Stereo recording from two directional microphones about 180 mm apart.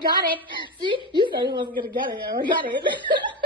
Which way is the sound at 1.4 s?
25° right (ahead or behind).